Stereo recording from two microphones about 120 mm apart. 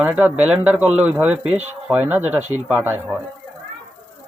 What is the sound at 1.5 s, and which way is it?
Speech, 65° right (ahead or behind).